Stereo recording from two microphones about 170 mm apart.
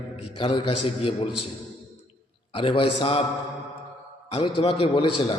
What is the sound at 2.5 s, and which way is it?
Speech, 30° left (ahead or behind).